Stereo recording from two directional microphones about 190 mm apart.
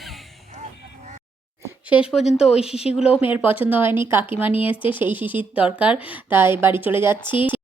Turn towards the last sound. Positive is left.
turn(degrees=-10)  # may be behind; listen again after turning